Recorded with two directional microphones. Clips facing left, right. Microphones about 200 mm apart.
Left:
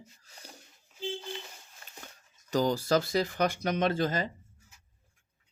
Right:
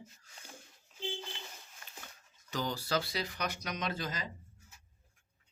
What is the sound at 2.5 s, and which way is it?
Speech, 45° left (ahead or behind).